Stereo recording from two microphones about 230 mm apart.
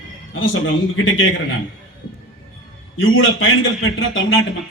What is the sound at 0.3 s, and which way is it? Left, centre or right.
Speech, left.